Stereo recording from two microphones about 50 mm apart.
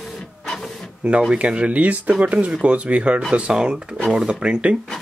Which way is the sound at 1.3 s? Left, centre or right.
Right.